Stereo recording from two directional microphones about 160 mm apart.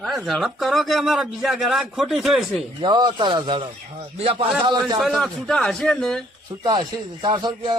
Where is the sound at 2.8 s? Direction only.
25° right (ahead or behind).